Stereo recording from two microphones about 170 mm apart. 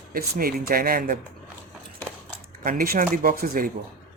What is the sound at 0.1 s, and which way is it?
Speech, 60° right (ahead or behind).